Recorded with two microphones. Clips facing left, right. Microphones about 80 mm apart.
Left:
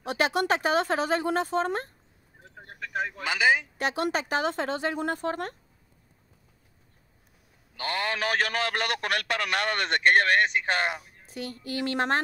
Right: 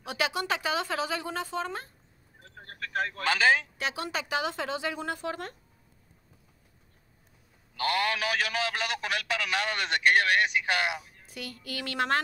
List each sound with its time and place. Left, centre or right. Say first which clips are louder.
0.0 s a man's voice: left 5 dB; left
2.4 s speech: even; centre
3.7 s a man's voice: left 5 dB; left
7.7 s a man's voice: right 2 dB; left
8.2 s a man's voice: left 3 dB; left